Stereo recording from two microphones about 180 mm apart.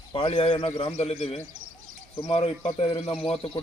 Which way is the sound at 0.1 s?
30° left (ahead or behind).